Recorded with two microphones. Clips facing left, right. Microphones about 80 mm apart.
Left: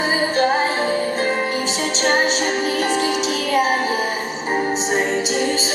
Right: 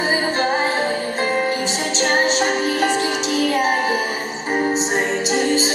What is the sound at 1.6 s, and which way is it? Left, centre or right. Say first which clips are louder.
Music: even; left.